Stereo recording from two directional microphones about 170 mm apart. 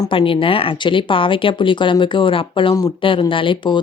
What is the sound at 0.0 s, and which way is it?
Speech, 30° left (ahead or behind).